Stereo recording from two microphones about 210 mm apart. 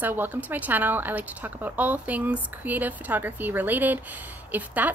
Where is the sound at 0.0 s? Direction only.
10° right (ahead or behind).